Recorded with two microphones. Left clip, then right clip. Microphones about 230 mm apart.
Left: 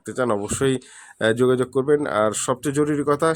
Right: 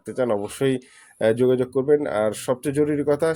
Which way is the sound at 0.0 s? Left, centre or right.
Centre.